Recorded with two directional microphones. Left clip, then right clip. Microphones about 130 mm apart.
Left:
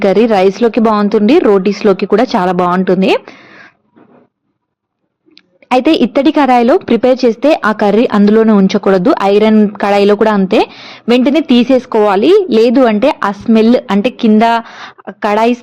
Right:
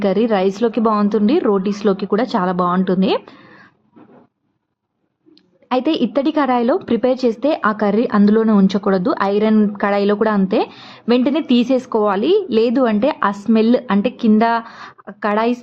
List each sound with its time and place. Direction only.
0.0 s a woman's voice: 25° left (ahead or behind)
5.6 s a woman's voice: 30° left (ahead or behind)